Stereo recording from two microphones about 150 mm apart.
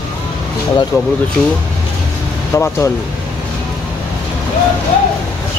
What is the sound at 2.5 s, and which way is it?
Speech, 20° left (ahead or behind).